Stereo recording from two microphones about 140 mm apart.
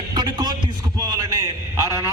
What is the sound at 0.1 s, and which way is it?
Music, 30° right (ahead or behind).